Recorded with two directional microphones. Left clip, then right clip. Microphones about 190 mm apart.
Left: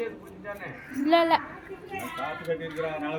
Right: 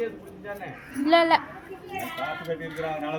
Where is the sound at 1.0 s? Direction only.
5° right (ahead or behind).